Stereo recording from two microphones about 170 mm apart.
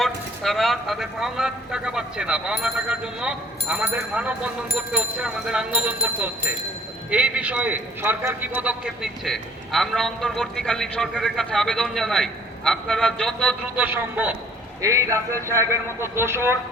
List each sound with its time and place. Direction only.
0.0 s a man's voice: centre (ahead or behind)
13.7 s a man's voice: 10° right (ahead or behind)